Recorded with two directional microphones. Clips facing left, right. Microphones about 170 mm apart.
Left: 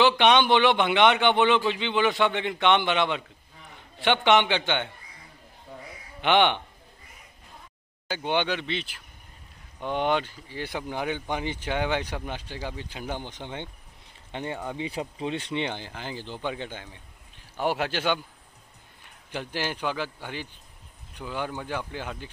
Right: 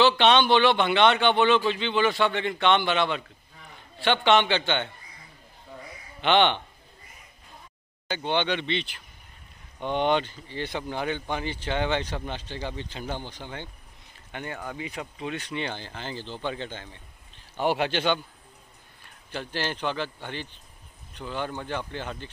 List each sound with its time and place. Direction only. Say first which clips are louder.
0.0 s speech: even; 15° left (ahead or behind)
6.2 s speech: even; 10° left (ahead or behind)
8.1 s speech: even; 10° left (ahead or behind)
19.3 s speech: even; 10° left (ahead or behind)